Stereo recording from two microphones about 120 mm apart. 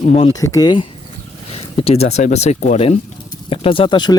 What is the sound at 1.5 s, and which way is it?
Speech, 55° left (ahead or behind).